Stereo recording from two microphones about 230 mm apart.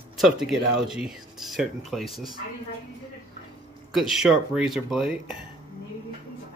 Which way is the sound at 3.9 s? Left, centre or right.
Centre.